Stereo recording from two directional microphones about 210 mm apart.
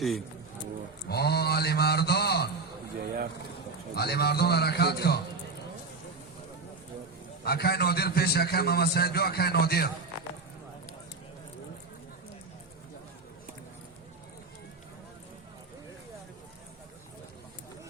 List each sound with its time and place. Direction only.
1.0 s mantra: 50° left (ahead or behind)
3.0 s speech: 45° right (ahead or behind)
3.9 s a man's voice: 50° left (ahead or behind)
7.4 s a man's voice: 50° left (ahead or behind)